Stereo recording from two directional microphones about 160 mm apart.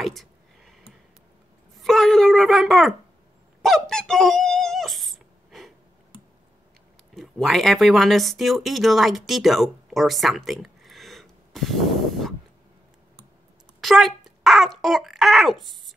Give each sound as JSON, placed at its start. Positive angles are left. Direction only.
{"t": 0.0, "sound": "a sound", "side_deg": 0}
{"t": 3.6, "sound": "squeak", "side_deg": 5}
{"t": 7.2, "sound": "speech", "side_deg": 0}
{"t": 13.7, "sound": "a child's voice", "side_deg": 0}